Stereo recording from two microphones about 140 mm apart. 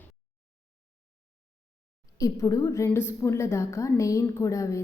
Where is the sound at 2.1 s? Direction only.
25° left (ahead or behind).